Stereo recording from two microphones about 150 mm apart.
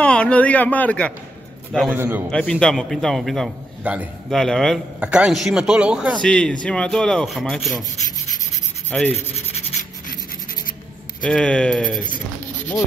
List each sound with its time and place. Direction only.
0.0 s a man's voice: 10° left (ahead or behind)
2.0 s a man's voice: 10° right (ahead or behind)
2.6 s a man's voice: 5° left (ahead or behind)
3.8 s a man's voice: 10° right (ahead or behind)
4.3 s a man's voice: 5° left (ahead or behind)
6.2 s a man's voice: 5° left (ahead or behind)
8.9 s rub: 10° left (ahead or behind)
9.5 s rub: 55° left (ahead or behind)
11.2 s a man's voice: 5° left (ahead or behind)